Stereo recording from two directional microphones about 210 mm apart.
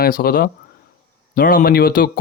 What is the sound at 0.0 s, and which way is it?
Speech, 45° left (ahead or behind).